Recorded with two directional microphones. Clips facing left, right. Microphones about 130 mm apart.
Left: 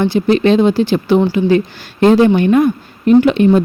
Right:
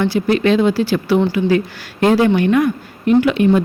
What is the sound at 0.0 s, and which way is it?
Speech, 25° left (ahead or behind).